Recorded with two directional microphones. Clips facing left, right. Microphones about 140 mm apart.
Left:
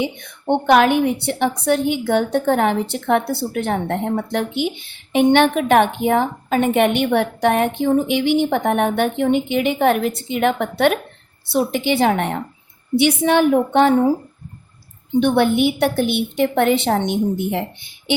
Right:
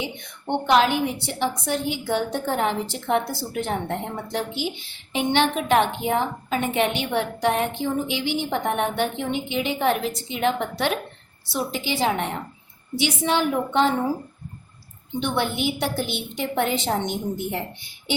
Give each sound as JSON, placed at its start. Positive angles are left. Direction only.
{"t": 0.4, "sound": "a woman's voice", "side_deg": 55}
{"t": 15.2, "sound": "a woman's voice", "side_deg": 55}